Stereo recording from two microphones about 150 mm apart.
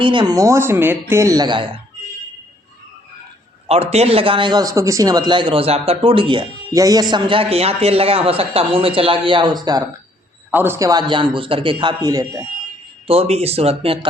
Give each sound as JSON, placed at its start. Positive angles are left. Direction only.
{"t": 0.0, "sound": "a man's voice", "side_deg": -30}
{"t": 3.7, "sound": "a man's voice", "side_deg": -40}
{"t": 10.5, "sound": "a man's voice", "side_deg": -15}
{"t": 13.1, "sound": "a man's voice", "side_deg": -40}